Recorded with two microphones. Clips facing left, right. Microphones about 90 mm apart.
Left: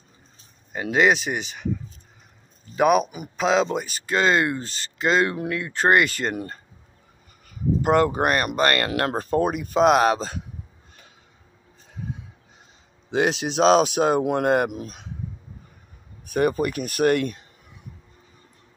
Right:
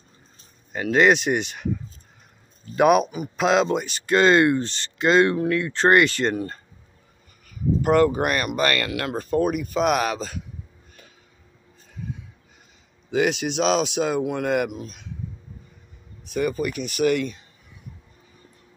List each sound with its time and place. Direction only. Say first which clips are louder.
0.9 s speech: right 2 dB; 5° left (ahead or behind)
7.4 s speech: even; 25° left (ahead or behind)
8.1 s speech: left 1 dB; 35° left (ahead or behind)
13.1 s speech: even; 35° left (ahead or behind)
16.3 s speech: left 3 dB; 55° left (ahead or behind)